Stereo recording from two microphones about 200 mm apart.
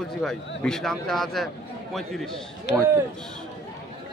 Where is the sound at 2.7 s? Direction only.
60° left (ahead or behind).